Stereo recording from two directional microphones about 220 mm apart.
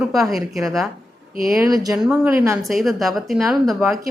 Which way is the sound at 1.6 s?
15° right (ahead or behind).